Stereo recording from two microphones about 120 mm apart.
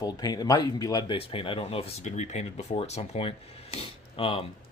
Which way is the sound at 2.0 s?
80° left.